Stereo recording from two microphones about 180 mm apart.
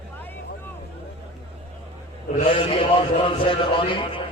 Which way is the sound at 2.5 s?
30° left (ahead or behind).